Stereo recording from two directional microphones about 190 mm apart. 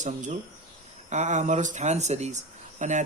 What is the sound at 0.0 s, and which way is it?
Speech, 40° right (ahead or behind).